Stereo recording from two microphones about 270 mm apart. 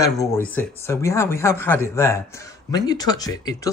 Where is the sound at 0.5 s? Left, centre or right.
Centre.